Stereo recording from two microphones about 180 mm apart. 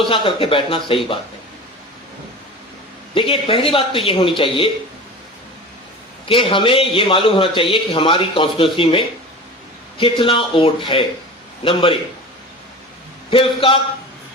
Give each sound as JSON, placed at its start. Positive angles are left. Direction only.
{"t": 0.0, "sound": "a man's voice", "side_deg": 30}
{"t": 3.2, "sound": "a man's voice", "side_deg": 30}
{"t": 6.2, "sound": "a man's voice", "side_deg": 30}
{"t": 13.3, "sound": "a man's voice", "side_deg": 30}